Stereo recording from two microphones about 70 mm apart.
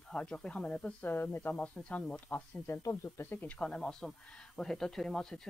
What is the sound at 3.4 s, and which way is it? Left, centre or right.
Speech, centre.